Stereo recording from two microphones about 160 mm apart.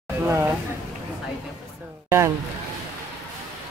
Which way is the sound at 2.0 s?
15° right (ahead or behind).